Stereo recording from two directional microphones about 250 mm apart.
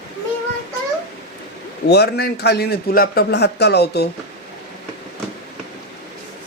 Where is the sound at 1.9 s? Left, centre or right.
Left.